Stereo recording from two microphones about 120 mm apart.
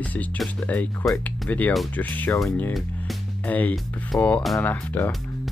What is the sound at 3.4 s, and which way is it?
Speech, 15° left (ahead or behind).